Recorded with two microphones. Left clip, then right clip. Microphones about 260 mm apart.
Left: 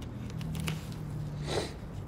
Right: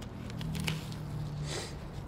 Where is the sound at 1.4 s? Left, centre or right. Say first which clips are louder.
Left 7 dB; centre.